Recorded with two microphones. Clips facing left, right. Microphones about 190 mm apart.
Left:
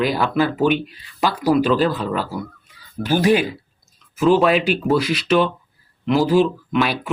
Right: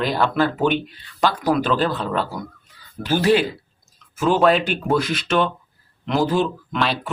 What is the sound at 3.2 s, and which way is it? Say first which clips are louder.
Speech: even; 15° left (ahead or behind).